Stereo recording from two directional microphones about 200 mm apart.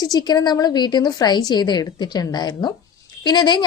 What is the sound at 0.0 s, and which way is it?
A woman's voice, 20° left (ahead or behind).